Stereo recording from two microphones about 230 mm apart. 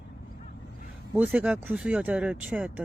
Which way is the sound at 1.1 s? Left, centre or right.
Centre.